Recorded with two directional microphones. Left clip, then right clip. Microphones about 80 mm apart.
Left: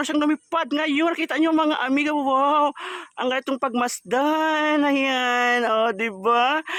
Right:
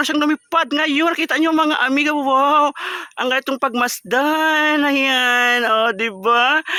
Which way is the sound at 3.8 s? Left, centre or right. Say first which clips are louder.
Right 4 dB; right.